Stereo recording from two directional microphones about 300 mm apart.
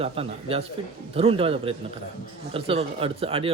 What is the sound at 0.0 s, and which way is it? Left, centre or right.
A man's voice, centre.